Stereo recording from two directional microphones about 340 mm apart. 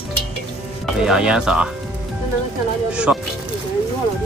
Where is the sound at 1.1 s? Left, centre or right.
Centre.